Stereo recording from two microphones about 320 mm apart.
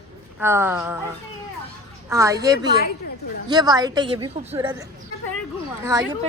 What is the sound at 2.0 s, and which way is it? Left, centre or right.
A woman's voice, centre.